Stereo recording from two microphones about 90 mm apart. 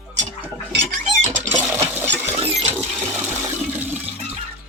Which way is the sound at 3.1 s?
20° right (ahead or behind).